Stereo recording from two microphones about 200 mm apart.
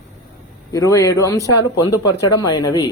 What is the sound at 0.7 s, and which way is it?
A man's voice, 15° left (ahead or behind).